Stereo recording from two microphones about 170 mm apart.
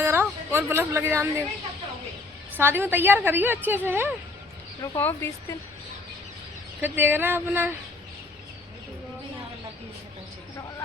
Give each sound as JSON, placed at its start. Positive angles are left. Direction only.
{"t": 0.0, "sound": "speech", "side_deg": -15}
{"t": 2.6, "sound": "a woman's voice", "side_deg": -15}
{"t": 4.8, "sound": "speech", "side_deg": 15}
{"t": 6.8, "sound": "a woman's voice", "side_deg": -10}